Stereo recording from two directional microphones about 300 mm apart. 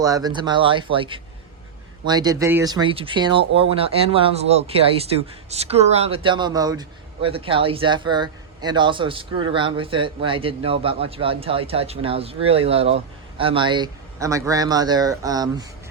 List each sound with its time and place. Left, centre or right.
0.0 s speech: centre